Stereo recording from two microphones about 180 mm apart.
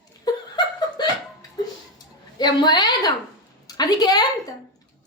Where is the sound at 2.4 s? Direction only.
25° left (ahead or behind).